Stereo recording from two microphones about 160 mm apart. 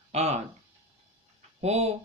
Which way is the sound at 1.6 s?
45° right (ahead or behind).